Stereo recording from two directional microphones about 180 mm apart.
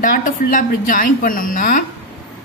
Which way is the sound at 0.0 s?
50° left (ahead or behind).